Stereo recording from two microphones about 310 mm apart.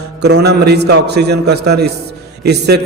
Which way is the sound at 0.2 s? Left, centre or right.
Right.